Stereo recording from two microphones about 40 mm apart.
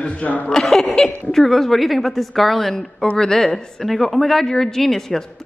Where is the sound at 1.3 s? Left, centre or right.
Centre.